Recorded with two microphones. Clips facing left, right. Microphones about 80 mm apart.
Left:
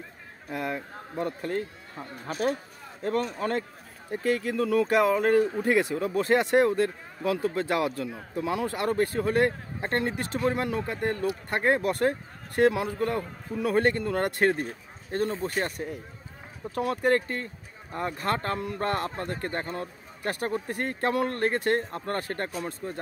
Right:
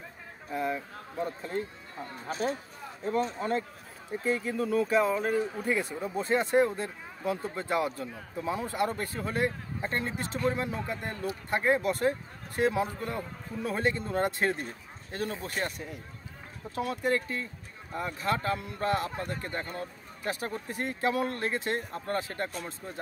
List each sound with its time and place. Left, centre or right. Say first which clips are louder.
0.5 s a man's voice: even; left
3.0 s a man's voice: left 2 dB; left
12.5 s a man's voice: left 5 dB; left
15.0 s a man's voice: left 6 dB; left